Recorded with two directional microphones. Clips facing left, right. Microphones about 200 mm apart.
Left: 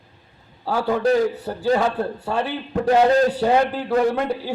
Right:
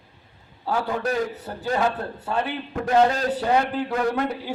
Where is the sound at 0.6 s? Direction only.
30° left (ahead or behind).